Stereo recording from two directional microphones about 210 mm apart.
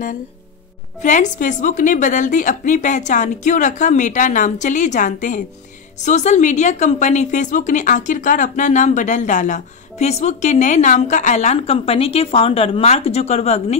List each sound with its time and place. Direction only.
1.0 s a woman's voice: 35° left (ahead or behind)